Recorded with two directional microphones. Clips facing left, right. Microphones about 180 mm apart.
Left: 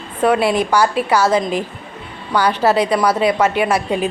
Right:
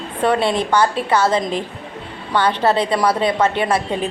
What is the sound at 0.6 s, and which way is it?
Speech, 10° left (ahead or behind).